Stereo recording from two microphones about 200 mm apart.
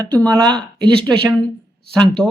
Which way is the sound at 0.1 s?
5° left (ahead or behind).